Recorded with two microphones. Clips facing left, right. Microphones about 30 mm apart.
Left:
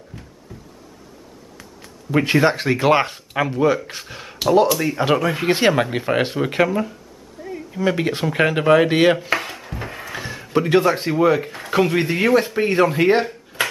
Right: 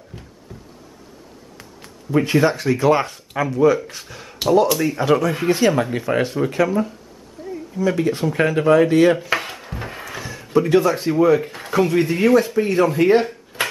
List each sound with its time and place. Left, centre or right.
0.5 s knock: centre
2.0 s speech: left
4.7 s speech: centre
5.1 s speech: left
9.3 s dishes: centre
10.5 s speech: left
13.2 s a sound: centre